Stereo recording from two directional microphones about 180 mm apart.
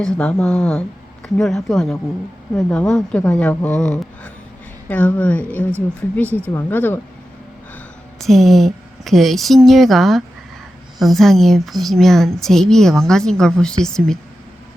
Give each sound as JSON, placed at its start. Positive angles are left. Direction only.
{"t": 0.0, "sound": "a woman's voice", "side_deg": 5}
{"t": 8.2, "sound": "a woman's voice", "side_deg": 0}